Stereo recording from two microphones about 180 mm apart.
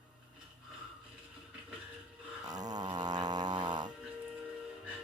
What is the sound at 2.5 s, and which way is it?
Dog, 20° right (ahead or behind).